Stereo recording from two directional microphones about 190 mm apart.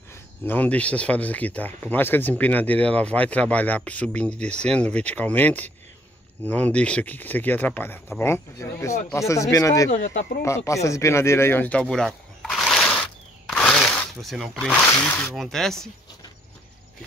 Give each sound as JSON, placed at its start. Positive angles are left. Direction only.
{"t": 0.5, "sound": "speech", "side_deg": 10}
{"t": 9.8, "sound": "speech", "side_deg": 40}
{"t": 10.4, "sound": "speech", "side_deg": 15}